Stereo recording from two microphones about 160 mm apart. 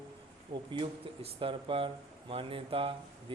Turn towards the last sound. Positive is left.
turn(degrees=-35)  # may be behind; listen again after turning